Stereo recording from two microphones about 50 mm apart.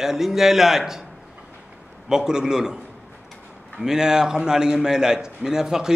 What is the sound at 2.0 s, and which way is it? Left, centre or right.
Speech, centre.